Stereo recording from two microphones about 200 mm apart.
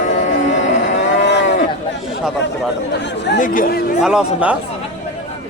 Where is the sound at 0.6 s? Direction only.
60° left (ahead or behind).